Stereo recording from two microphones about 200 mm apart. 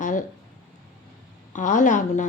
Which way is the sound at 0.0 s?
40° left (ahead or behind).